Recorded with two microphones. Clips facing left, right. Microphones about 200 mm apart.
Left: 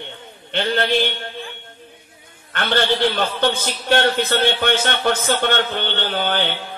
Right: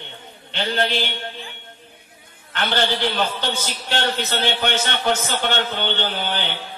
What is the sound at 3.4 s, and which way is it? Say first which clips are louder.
A man's voice: left 6 dB; 55° left (ahead or behind).